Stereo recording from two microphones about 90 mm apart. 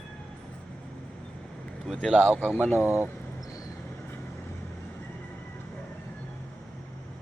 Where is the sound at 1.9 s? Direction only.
5° right (ahead or behind).